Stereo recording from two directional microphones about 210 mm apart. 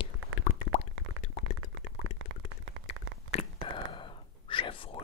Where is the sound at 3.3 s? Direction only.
30° left (ahead or behind).